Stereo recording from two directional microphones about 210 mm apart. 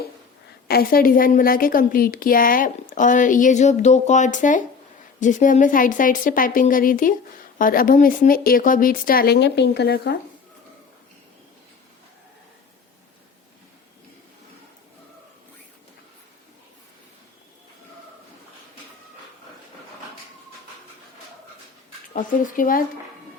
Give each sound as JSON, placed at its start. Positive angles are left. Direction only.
{"t": 0.7, "sound": "a woman's voice", "side_deg": 45}
{"t": 22.1, "sound": "speech", "side_deg": 40}